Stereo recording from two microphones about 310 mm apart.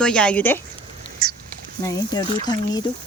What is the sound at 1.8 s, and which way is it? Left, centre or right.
Speech, centre.